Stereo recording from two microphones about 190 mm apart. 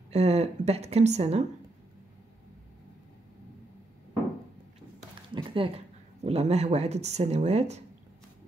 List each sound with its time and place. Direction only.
0.1 s speech: 35° right (ahead or behind)
5.3 s a sound: 25° right (ahead or behind)
6.2 s speech: 35° right (ahead or behind)